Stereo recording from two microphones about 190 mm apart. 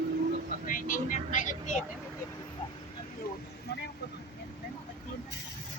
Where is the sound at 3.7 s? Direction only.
60° left (ahead or behind).